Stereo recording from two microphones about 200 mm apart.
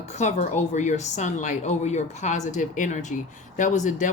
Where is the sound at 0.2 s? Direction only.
35° left (ahead or behind).